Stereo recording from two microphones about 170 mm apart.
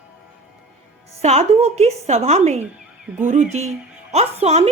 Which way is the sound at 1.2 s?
40° right (ahead or behind).